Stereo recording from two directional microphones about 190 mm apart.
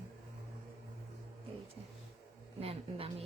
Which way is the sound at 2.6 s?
30° right (ahead or behind).